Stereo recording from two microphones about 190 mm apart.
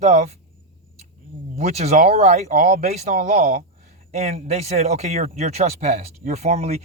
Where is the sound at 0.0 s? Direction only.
40° right (ahead or behind).